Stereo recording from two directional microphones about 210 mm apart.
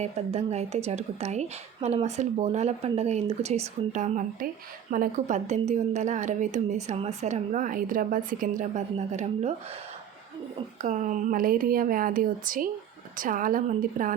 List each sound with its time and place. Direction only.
0.0 s speech: 30° right (ahead or behind)
10.8 s speech: 40° right (ahead or behind)